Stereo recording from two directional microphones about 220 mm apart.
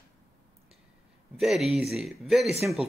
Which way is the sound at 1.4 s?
Centre (ahead or behind).